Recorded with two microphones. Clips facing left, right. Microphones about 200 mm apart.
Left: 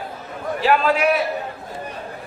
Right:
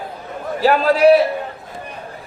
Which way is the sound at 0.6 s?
40° right (ahead or behind).